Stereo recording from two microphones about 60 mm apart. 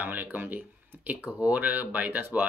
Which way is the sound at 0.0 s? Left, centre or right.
Right.